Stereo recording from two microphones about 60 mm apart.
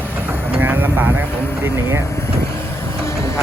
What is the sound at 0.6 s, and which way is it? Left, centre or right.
Vehicle, right.